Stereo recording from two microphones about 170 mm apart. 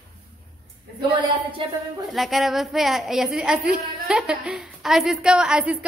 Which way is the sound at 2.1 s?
Centre (ahead or behind).